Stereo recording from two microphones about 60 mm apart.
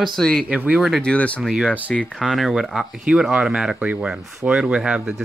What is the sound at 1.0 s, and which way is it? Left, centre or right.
Speech, left.